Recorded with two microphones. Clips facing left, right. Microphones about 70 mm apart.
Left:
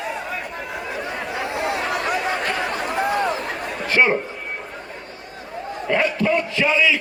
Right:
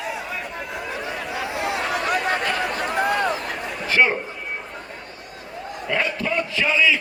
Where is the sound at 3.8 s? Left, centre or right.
Left.